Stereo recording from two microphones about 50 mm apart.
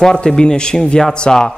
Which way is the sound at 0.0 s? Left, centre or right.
Centre.